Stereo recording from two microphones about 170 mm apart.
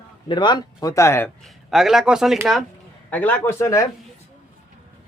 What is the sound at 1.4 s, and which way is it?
Speech, centre (ahead or behind).